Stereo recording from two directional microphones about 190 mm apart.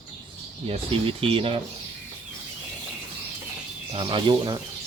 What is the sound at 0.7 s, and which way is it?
Speech, 30° right (ahead or behind).